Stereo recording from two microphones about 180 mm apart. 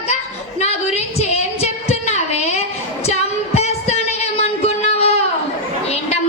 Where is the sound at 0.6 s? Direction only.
35° left (ahead or behind).